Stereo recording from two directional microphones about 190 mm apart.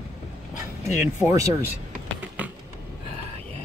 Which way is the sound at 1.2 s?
20° right (ahead or behind).